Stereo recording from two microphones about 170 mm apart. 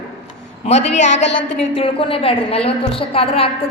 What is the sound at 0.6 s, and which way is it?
A woman's voice, 40° left (ahead or behind).